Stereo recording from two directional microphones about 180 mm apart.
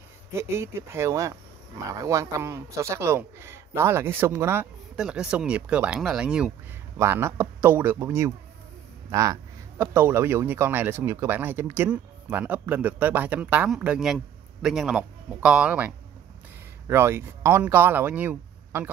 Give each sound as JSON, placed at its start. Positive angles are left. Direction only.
{"t": 0.3, "sound": "speech", "side_deg": -15}